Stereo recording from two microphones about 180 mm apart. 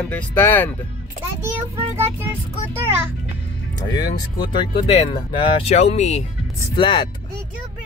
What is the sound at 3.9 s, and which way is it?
Speech, 20° left (ahead or behind).